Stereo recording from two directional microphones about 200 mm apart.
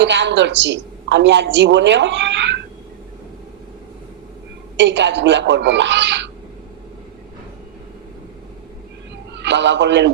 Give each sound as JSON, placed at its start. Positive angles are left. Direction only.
{"t": 0.0, "sound": "a woman's voice", "side_deg": -60}
{"t": 4.8, "sound": "a woman's voice", "side_deg": -60}
{"t": 9.3, "sound": "a man's voice", "side_deg": -60}